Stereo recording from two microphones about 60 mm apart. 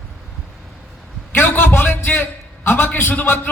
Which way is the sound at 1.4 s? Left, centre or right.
Left.